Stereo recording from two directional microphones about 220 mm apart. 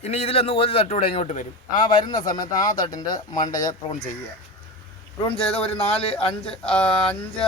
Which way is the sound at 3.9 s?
35° left (ahead or behind).